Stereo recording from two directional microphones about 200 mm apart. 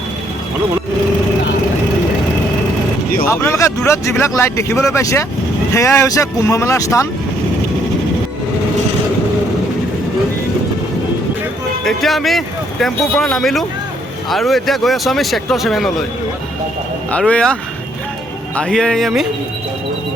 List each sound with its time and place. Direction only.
3.2 s speech: 15° left (ahead or behind)
11.9 s speech: centre (ahead or behind)
17.1 s speech: 5° left (ahead or behind)